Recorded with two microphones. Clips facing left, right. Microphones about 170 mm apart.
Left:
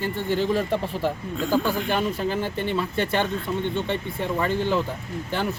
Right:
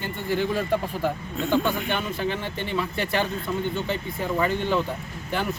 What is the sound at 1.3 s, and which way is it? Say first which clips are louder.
Speech: even; 5° left (ahead or behind).